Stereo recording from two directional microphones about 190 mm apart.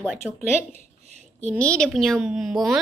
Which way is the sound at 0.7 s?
35° right (ahead or behind).